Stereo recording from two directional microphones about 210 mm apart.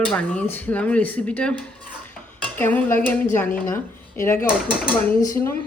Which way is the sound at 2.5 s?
10° left (ahead or behind).